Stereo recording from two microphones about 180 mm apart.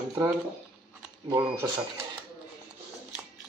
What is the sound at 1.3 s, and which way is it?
Speech, 15° right (ahead or behind).